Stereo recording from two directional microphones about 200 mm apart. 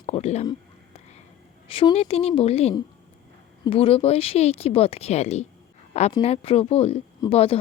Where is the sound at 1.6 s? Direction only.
25° left (ahead or behind).